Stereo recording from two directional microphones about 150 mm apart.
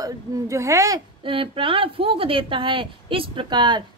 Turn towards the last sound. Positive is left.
turn(degrees=-30)  # may be behind; listen again after turning